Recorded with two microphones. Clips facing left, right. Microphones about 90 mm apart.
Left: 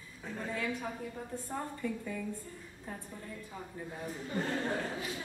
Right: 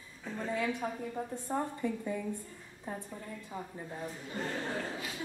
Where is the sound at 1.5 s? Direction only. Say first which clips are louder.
Right 4 dB; 20° right (ahead or behind).